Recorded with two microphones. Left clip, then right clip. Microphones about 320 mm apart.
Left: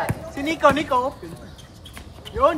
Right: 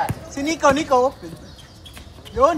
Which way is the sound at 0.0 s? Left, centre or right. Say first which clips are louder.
Right 2 dB; centre.